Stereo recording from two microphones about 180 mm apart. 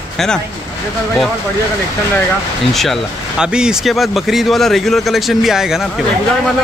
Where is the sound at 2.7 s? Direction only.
Centre (ahead or behind).